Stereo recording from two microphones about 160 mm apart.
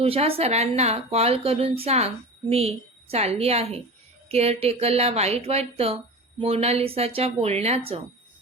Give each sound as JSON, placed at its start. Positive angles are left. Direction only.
{"t": 0.0, "sound": "a woman's voice", "side_deg": -35}